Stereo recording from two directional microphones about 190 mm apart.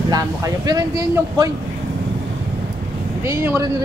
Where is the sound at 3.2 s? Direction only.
15° right (ahead or behind).